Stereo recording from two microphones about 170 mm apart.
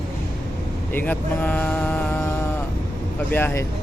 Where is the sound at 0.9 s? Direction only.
10° left (ahead or behind).